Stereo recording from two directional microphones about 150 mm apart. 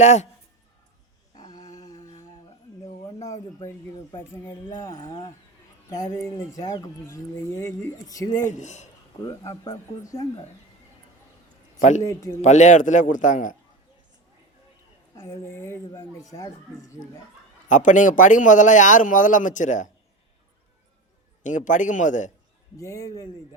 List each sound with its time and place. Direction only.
0.0 s speech: 50° left (ahead or behind)
1.4 s humming: 25° left (ahead or behind)
3.1 s a sound: 25° left (ahead or behind)
4.3 s speech: 15° left (ahead or behind)
4.9 s speech: 35° left (ahead or behind)
5.9 s speech: 20° left (ahead or behind)
8.4 s speech: 55° left (ahead or behind)
9.2 s speech: 25° left (ahead or behind)
11.8 s a man's voice: 55° left (ahead or behind)
15.1 s speech: 20° left (ahead or behind)
17.7 s a man's voice: 55° left (ahead or behind)
21.4 s a man's voice: 55° left (ahead or behind)
22.8 s speech: 20° left (ahead or behind)